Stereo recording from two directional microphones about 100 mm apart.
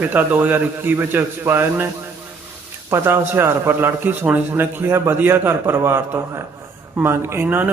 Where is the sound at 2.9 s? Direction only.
25° right (ahead or behind).